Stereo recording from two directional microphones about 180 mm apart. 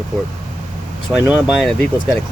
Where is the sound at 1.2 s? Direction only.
Centre (ahead or behind).